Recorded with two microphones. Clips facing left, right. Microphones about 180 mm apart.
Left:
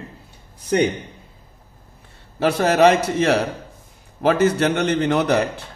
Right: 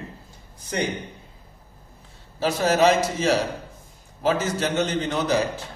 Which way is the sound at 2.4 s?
60° left (ahead or behind).